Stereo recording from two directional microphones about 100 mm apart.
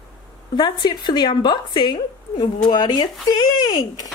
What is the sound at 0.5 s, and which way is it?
A woman's voice, 50° left (ahead or behind).